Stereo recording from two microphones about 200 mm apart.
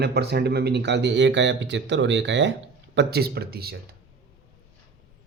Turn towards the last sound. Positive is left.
turn(degrees=-50)  # may be behind; listen again after turning